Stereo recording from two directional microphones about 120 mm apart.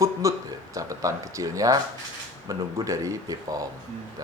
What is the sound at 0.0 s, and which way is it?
Speech, 25° right (ahead or behind).